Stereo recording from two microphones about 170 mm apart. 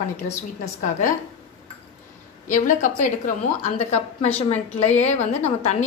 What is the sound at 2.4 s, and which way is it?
A woman's voice, 50° left (ahead or behind).